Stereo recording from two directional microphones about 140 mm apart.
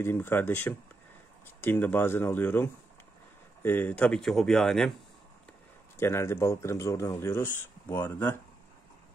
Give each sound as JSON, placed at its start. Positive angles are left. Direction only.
{"t": 0.0, "sound": "speech", "side_deg": 15}
{"t": 5.9, "sound": "speech", "side_deg": 20}